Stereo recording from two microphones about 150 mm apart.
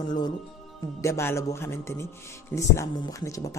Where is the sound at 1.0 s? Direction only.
20° left (ahead or behind).